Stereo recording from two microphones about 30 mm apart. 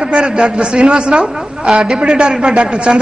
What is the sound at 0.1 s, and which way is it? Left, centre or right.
A man's voice, right.